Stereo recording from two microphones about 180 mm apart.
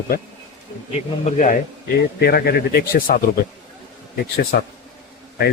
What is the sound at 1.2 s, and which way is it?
Speech, 45° left (ahead or behind).